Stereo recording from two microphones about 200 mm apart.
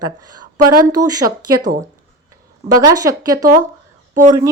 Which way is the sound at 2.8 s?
20° right (ahead or behind).